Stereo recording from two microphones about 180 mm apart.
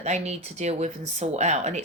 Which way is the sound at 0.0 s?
40° right (ahead or behind).